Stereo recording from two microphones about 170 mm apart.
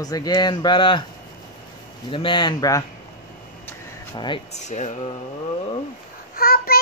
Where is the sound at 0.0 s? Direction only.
20° left (ahead or behind).